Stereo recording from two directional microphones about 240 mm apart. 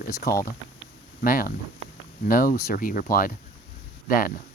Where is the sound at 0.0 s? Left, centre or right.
Left.